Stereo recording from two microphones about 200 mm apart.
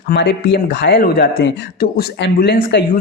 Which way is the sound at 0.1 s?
60° left (ahead or behind).